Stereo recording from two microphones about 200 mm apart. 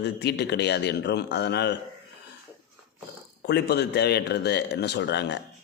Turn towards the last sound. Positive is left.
turn(degrees=60)  # may be behind; listen again after turning